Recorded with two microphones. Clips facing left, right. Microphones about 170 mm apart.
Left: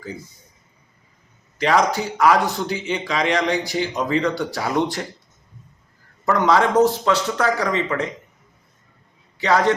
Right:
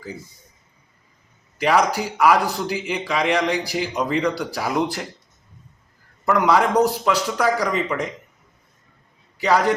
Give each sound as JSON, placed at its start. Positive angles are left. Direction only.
{"t": 1.5, "sound": "a man's voice", "side_deg": -10}
{"t": 6.2, "sound": "a man's voice", "side_deg": -5}
{"t": 9.4, "sound": "a man's voice", "side_deg": -10}